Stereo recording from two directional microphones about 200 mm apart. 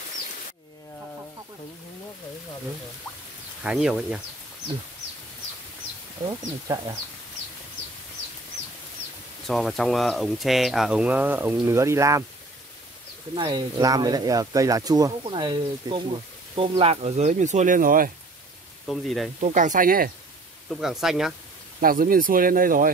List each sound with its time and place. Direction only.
3.6 s speech: 5° right (ahead or behind)
6.2 s speech: 20° right (ahead or behind)
9.5 s speech: centre (ahead or behind); by 12.3 s 15° right (ahead or behind)
13.3 s speech: 20° right (ahead or behind); by 18.1 s 45° right (ahead or behind)
18.9 s speech: centre (ahead or behind)
19.4 s speech: 40° right (ahead or behind)
20.7 s speech: centre (ahead or behind)
21.8 s speech: 45° right (ahead or behind)